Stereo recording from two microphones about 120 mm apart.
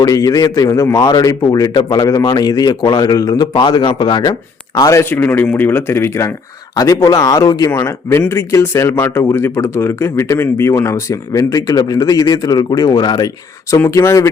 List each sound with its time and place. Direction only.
0.0 s a man's voice: 30° left (ahead or behind)